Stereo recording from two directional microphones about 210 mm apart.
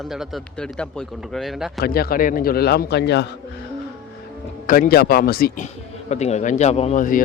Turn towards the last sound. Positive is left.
turn(degrees=40)  # may be behind; listen again after turning